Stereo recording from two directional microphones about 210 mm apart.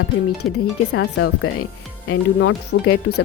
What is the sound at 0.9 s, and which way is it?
Speech, 75° left (ahead or behind).